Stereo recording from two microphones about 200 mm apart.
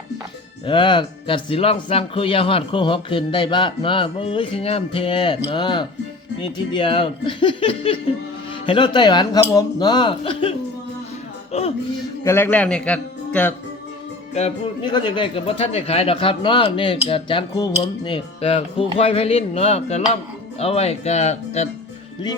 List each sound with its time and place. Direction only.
0.6 s speech: 25° left (ahead or behind)
11.5 s speech: 30° left (ahead or behind)
12.2 s a man's voice: 10° left (ahead or behind)
14.3 s speech: 30° left (ahead or behind)